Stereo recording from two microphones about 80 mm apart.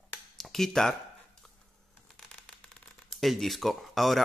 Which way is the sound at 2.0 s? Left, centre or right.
Centre.